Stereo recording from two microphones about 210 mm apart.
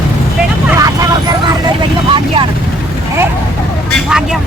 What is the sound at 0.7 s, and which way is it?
Vehicle, 15° right (ahead or behind).